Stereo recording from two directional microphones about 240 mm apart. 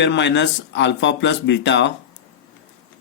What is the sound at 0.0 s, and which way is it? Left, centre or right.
Speech, left.